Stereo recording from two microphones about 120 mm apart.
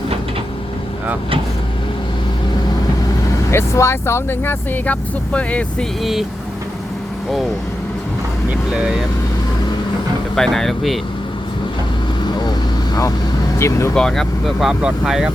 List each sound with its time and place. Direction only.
3.5 s speech: 20° left (ahead or behind)
6.0 s speech: centre (ahead or behind)
8.7 s speech: 5° right (ahead or behind)
10.3 s speech: 5° left (ahead or behind)
12.4 s vehicle: 35° left (ahead or behind)
13.6 s speech: 25° left (ahead or behind)
13.9 s speech: 5° left (ahead or behind)